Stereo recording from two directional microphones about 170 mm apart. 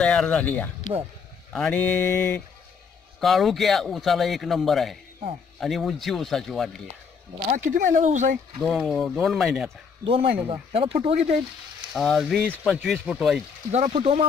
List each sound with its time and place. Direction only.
0.0 s a man's voice: 5° left (ahead or behind)
1.5 s mantra: 5° left (ahead or behind)
3.2 s a man's voice: centre (ahead or behind)
7.5 s speech: 50° right (ahead or behind)
8.6 s a man's voice: centre (ahead or behind)
10.5 s speech: 30° right (ahead or behind)
11.9 s a man's voice: centre (ahead or behind)
13.7 s speech: 40° right (ahead or behind)